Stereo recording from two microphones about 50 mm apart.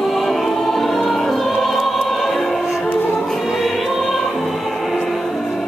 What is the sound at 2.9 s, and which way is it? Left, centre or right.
Music, left.